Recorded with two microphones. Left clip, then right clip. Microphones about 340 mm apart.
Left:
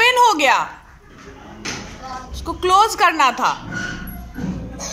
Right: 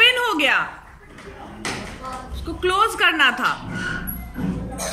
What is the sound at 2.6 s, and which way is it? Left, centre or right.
Speech, centre.